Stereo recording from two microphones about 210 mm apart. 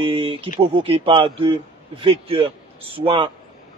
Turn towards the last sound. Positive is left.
turn(degrees=-25)  # may be behind; listen again after turning